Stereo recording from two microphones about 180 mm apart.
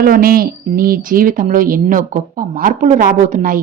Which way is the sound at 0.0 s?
55° right (ahead or behind).